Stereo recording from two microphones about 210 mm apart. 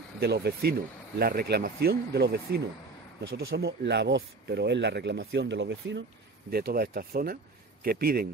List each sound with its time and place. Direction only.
0.2 s speech: 50° right (ahead or behind)
6.5 s speech: 45° right (ahead or behind)